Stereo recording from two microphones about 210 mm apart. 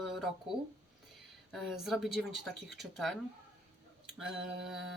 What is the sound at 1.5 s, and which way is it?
A woman's voice, centre (ahead or behind).